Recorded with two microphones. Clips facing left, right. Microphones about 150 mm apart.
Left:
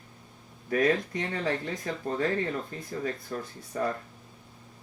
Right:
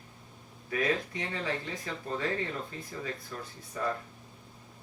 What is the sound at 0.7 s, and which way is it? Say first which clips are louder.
Speech: left 5 dB; 45° left (ahead or behind).